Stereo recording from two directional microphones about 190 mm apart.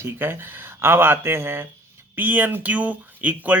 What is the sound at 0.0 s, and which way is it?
Speech, 10° right (ahead or behind).